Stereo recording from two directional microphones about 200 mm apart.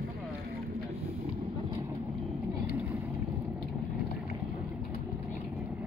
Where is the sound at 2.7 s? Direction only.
10° right (ahead or behind).